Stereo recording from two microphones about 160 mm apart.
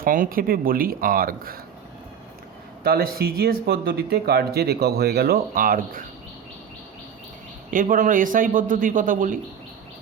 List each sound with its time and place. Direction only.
0.0 s a man's voice: 60° right (ahead or behind)
2.8 s speech: 70° right (ahead or behind)
7.7 s a man's voice: 60° right (ahead or behind)